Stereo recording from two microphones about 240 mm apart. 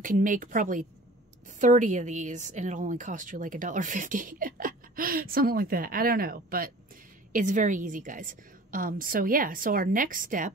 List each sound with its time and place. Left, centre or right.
0.0 s a woman's voice: right